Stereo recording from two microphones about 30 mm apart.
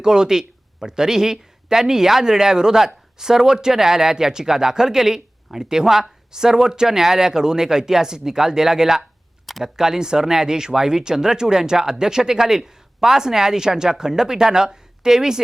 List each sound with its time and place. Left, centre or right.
0.0 s speech: right
9.5 s speech: centre
9.7 s speech: right